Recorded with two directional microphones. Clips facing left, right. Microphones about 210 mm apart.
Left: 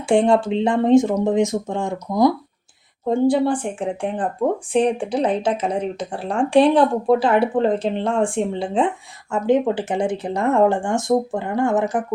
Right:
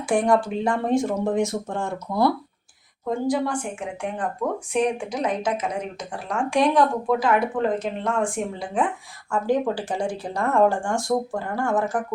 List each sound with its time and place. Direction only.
0.1 s speech: 25° left (ahead or behind)
3.1 s speech: 30° left (ahead or behind)